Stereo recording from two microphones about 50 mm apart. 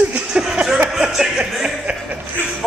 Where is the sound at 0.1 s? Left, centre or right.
Centre.